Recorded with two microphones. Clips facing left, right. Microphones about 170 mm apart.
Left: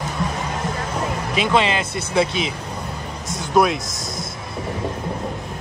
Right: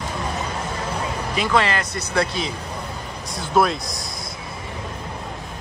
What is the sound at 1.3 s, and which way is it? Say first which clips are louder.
Speech: left 2 dB; 20° left (ahead or behind).